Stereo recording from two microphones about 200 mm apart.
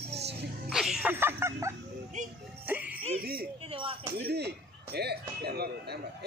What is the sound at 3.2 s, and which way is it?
Speech, 50° right (ahead or behind).